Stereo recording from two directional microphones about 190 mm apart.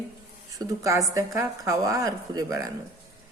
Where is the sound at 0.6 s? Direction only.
15° right (ahead or behind).